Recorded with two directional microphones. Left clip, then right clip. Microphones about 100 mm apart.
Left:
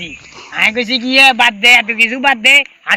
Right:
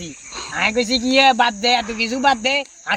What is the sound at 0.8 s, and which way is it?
Speech, 45° right (ahead or behind).